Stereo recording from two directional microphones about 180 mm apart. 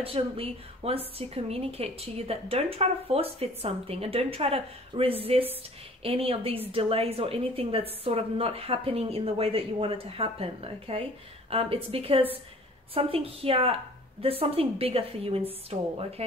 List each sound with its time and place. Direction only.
0.0 s a woman's voice: 30° right (ahead or behind)